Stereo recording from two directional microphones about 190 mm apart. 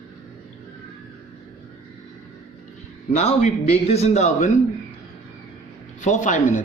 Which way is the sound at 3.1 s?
35° left (ahead or behind).